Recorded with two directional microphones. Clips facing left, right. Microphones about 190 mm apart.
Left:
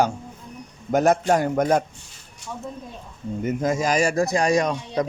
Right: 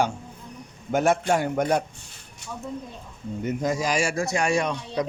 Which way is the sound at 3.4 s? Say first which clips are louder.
Left 3 dB; 50° left (ahead or behind).